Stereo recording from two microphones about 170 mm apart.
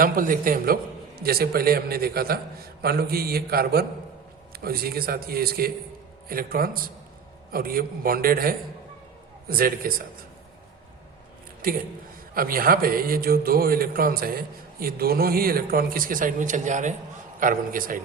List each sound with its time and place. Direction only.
0.0 s a man's voice: 55° right (ahead or behind)
11.6 s a man's voice: 55° right (ahead or behind)